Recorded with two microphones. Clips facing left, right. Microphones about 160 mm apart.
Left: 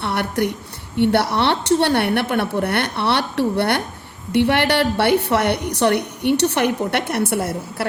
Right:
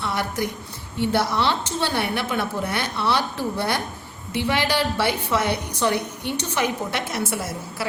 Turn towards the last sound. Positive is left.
turn(degrees=60)  # may be behind; listen again after turning